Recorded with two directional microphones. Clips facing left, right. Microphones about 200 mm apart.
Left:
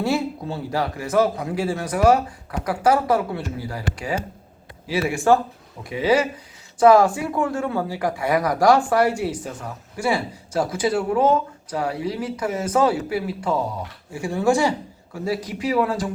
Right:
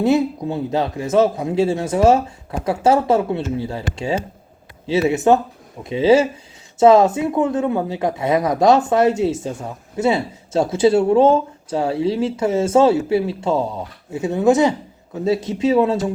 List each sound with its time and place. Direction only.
0.0 s speech: 20° right (ahead or behind)